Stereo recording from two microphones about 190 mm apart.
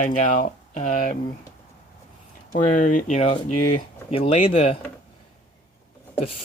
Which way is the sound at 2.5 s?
45° left (ahead or behind).